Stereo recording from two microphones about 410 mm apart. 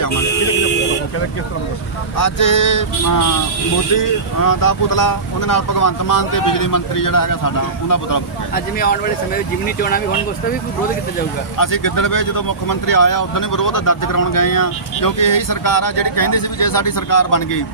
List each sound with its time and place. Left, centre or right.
2.1 s speech: left
4.4 s speech: left
8.5 s speech: left
11.5 s speech: left